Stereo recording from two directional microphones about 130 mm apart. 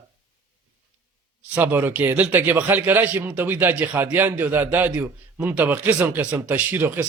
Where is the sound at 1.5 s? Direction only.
15° right (ahead or behind).